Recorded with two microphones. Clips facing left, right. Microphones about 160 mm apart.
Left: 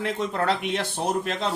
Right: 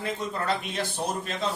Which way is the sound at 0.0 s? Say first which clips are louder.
Left 5 dB; 75° left (ahead or behind).